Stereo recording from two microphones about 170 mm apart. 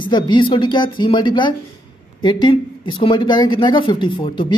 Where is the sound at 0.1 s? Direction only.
30° left (ahead or behind).